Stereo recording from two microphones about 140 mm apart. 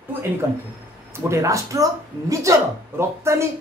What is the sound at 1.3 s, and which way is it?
A woman's voice, 20° right (ahead or behind).